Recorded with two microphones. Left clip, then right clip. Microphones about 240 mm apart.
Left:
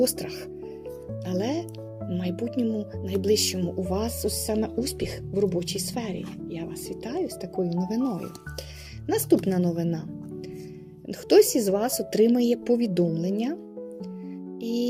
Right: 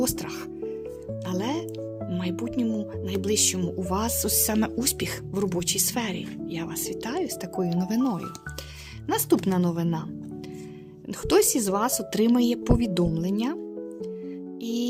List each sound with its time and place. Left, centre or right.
0.0 s speech: centre
11.3 s speech: right
14.6 s music: right